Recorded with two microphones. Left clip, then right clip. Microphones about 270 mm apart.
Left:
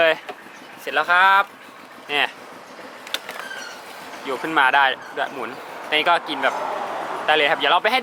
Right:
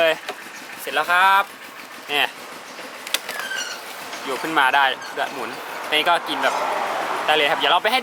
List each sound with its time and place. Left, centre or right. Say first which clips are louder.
0.0 s vehicle: left 1 dB; centre
0.9 s speech: left 1 dB; centre
4.3 s speech: left 1 dB; centre